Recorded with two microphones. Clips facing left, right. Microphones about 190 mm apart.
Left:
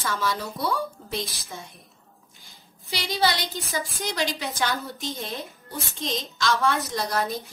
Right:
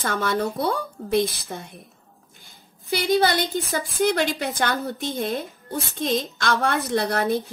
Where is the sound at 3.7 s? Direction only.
55° right (ahead or behind).